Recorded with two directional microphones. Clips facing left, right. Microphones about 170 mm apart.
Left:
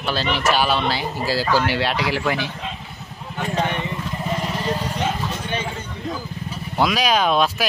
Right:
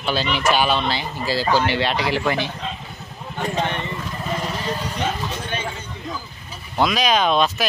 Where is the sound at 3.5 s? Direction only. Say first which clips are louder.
Left 2 dB; 5° left (ahead or behind).